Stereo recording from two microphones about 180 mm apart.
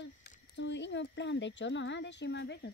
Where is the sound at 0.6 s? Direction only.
80° left.